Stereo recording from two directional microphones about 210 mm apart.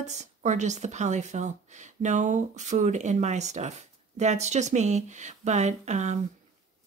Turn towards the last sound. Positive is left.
turn(degrees=-35)  # may be behind; listen again after turning